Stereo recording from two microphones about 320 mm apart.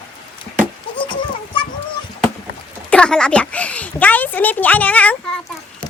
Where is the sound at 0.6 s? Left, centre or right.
Centre.